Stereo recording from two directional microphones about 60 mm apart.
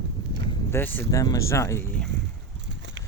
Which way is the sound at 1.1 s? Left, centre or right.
Left.